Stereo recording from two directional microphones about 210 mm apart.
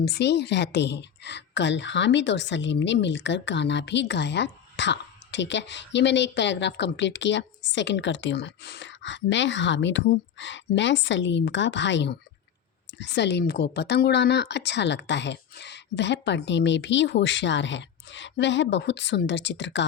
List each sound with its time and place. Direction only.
0.0 s a woman's voice: 55° left (ahead or behind)